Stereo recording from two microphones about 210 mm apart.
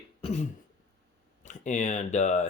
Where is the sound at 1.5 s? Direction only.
35° left (ahead or behind).